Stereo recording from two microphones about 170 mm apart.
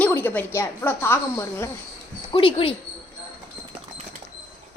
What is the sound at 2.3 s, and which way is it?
Speech, 30° left (ahead or behind).